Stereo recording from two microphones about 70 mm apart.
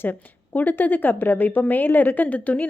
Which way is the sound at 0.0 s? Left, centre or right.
Left.